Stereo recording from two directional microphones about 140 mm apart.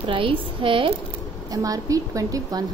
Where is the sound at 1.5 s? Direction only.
25° right (ahead or behind).